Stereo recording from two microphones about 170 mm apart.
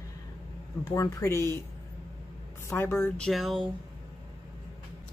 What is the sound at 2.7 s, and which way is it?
Speech, 15° left (ahead or behind).